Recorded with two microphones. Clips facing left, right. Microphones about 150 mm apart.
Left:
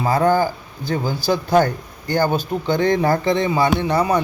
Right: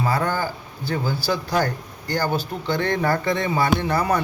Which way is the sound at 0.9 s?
20° left (ahead or behind).